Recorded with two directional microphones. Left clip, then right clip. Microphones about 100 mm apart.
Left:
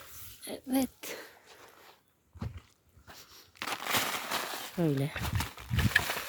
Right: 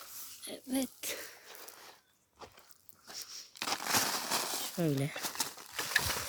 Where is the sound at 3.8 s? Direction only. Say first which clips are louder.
Left 2 dB; 35° left (ahead or behind).